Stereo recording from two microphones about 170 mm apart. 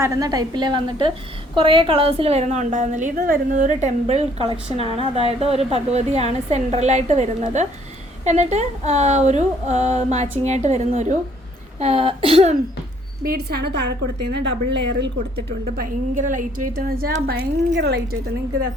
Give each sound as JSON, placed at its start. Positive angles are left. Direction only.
{"t": 0.0, "sound": "a woman's voice", "side_deg": -20}
{"t": 3.8, "sound": "speech", "side_deg": -40}
{"t": 13.2, "sound": "a woman's voice", "side_deg": -65}
{"t": 14.3, "sound": "a woman's voice", "side_deg": -90}
{"t": 17.7, "sound": "a woman's voice", "side_deg": -80}